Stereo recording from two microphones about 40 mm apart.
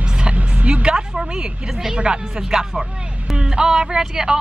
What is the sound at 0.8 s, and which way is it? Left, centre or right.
A woman's voice, centre.